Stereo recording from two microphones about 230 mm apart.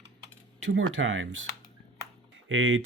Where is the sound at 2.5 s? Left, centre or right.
Right.